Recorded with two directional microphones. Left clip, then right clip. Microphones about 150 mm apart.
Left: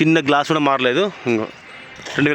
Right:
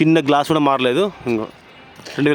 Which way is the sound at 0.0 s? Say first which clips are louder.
Right 1 dB; 10° right (ahead or behind).